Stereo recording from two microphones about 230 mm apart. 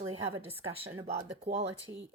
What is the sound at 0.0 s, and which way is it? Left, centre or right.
A woman's voice, right.